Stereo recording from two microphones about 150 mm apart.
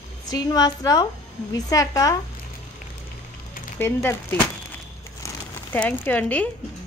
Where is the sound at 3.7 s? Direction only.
15° left (ahead or behind).